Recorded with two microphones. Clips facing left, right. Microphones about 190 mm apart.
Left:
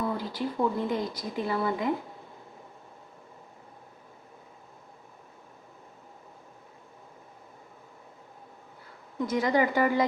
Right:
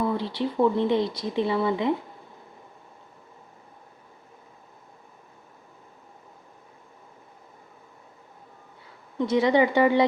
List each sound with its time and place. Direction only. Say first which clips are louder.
0.2 s speech: right 5 dB; 25° right (ahead or behind)
9.1 s speech: right 5 dB; 25° right (ahead or behind)